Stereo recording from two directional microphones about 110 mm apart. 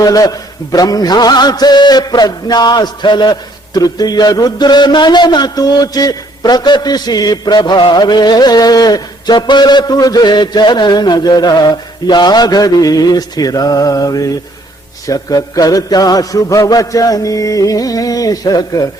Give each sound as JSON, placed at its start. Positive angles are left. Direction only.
{"t": 0.0, "sound": "mantra", "side_deg": 35}